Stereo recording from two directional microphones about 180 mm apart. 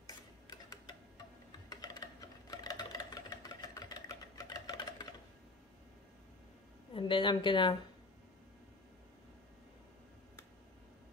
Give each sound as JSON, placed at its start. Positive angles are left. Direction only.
{"t": 0.5, "sound": "tick-tock", "side_deg": 20}
{"t": 1.7, "sound": "typing", "side_deg": 20}
{"t": 6.9, "sound": "a woman's voice", "side_deg": 30}